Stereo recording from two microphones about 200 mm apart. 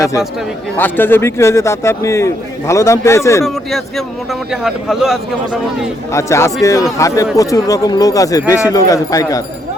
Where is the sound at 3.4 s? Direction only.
Centre (ahead or behind).